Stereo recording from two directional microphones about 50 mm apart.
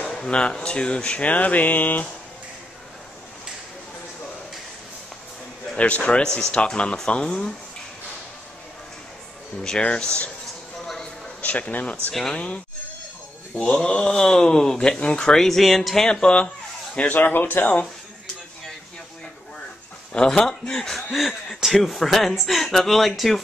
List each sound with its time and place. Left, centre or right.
0.3 s speech: centre
1.3 s a sound: left
5.8 s speech: left
9.6 s speech: centre
11.4 s a sound: left
12.1 s speech: centre
13.8 s speech: centre
16.1 s speech: centre
17.1 s a sound: left
20.1 s a woman's voice: centre